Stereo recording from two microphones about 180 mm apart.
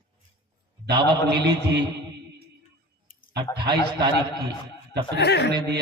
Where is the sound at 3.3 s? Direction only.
25° right (ahead or behind).